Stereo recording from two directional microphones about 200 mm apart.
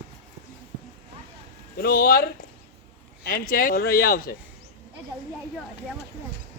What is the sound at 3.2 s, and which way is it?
Speech, 45° left (ahead or behind).